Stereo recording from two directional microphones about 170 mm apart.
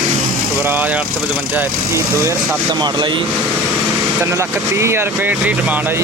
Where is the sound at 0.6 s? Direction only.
10° right (ahead or behind).